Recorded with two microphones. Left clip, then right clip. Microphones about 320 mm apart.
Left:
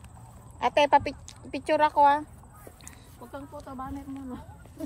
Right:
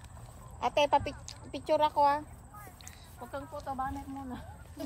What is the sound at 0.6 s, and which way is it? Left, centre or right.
Speech, left.